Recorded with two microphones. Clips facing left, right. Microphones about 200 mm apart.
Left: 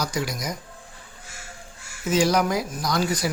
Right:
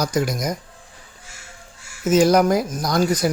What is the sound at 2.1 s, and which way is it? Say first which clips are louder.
Speech: right 6 dB; 45° right (ahead or behind).